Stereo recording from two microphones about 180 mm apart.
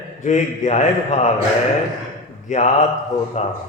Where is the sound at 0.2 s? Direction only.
40° left (ahead or behind).